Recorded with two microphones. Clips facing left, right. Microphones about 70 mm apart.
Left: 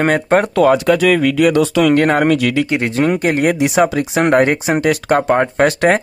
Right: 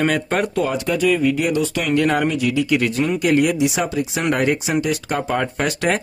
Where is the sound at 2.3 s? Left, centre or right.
Left.